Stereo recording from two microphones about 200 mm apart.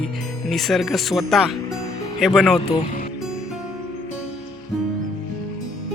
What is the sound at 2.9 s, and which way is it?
Music, 45° left (ahead or behind).